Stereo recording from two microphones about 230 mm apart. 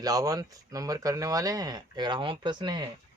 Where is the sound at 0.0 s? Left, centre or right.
Centre.